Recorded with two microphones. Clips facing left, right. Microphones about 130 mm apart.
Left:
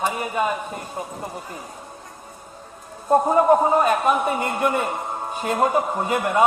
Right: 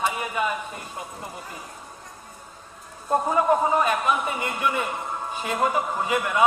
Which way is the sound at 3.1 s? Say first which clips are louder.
Left 5 dB; 40° left (ahead or behind).